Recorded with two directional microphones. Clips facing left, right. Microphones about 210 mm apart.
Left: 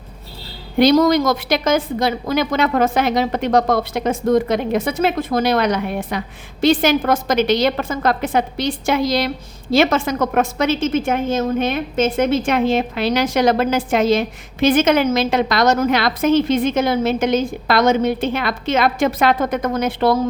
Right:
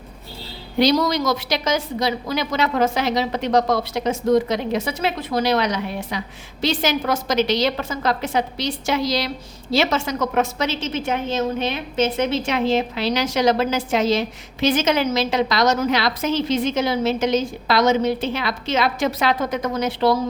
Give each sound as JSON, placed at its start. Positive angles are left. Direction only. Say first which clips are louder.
{"t": 0.8, "sound": "a woman's voice", "louder": "left 5 dB", "side_deg": 50}